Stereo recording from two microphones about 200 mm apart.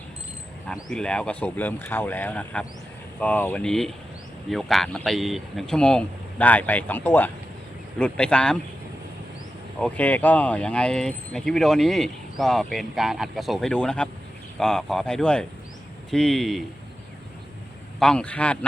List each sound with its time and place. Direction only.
0.7 s speech: 5° left (ahead or behind)
9.8 s speech: 5° left (ahead or behind)
18.0 s speech: 5° left (ahead or behind)